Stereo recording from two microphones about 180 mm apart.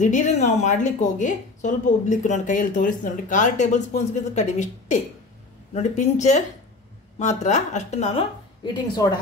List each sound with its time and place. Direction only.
0.0 s speech: 45° left (ahead or behind)
8.9 s a woman's voice: 25° left (ahead or behind)